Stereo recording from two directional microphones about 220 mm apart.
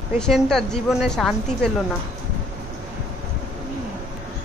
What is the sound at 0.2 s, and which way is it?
A woman's voice, centre (ahead or behind).